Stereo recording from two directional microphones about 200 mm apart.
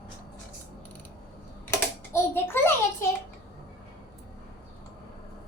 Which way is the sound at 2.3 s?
10° left (ahead or behind).